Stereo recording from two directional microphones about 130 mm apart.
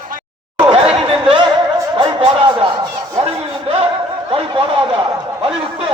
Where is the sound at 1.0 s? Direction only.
45° right (ahead or behind).